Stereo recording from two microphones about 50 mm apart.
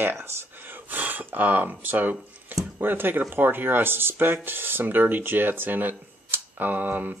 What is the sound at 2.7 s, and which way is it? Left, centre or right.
Speech, right.